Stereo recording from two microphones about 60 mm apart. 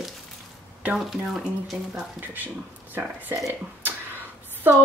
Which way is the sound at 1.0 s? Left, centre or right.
Centre.